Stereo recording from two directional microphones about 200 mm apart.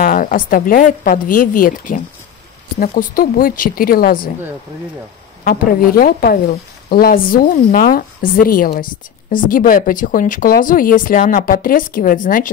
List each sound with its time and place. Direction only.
0.0 s a woman's voice: 45° left (ahead or behind)
5.4 s a woman's voice: 45° left (ahead or behind)